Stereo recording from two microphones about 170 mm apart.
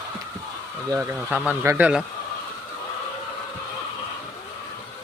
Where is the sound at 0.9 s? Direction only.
15° right (ahead or behind).